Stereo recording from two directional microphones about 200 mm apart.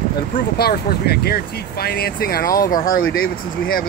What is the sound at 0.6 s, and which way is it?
Speech, 50° left (ahead or behind).